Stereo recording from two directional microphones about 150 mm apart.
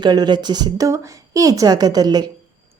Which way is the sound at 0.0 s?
30° right (ahead or behind).